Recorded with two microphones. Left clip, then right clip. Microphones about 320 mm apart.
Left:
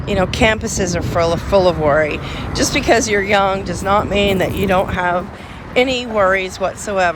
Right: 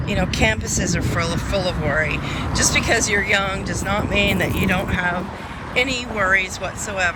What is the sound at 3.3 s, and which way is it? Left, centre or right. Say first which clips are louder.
Speech: left 5 dB; centre.